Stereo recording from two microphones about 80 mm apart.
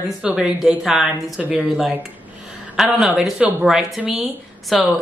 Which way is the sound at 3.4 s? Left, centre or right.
Right.